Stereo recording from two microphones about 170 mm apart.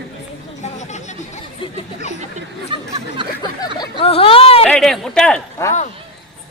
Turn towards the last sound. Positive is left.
turn(degrees=15)  # may be behind; listen again after turning